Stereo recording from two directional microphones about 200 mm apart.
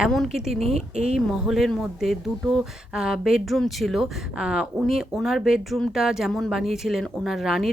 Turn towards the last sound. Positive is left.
turn(degrees=0)  # may be behind; listen again after turning